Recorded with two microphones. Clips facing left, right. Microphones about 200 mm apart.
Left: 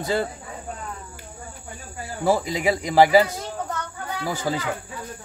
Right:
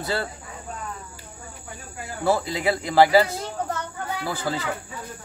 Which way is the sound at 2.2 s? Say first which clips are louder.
Left 1 dB; 15° left (ahead or behind).